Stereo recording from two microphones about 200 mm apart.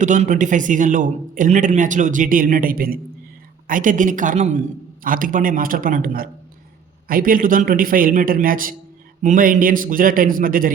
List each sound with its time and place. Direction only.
0.0 s a man's voice: 40° right (ahead or behind)